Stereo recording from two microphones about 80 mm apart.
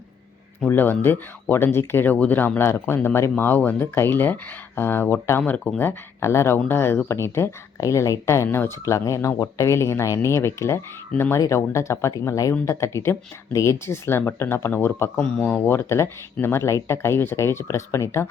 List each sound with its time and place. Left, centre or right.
0.7 s speech: left
15.2 s speech: centre; by 18.3 s left